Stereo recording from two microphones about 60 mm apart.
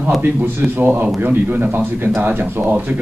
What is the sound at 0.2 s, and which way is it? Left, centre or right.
Speech, right.